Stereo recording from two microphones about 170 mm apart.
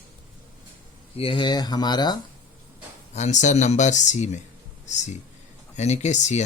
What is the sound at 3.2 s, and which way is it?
Speech, 45° left (ahead or behind).